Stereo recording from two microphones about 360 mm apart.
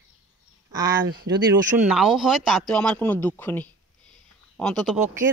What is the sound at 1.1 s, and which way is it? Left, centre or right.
Speech, right.